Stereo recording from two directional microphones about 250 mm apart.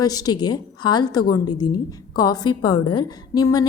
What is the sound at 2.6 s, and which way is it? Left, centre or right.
Speech, left.